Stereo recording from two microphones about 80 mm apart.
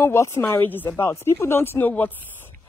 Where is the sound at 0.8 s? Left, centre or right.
Left.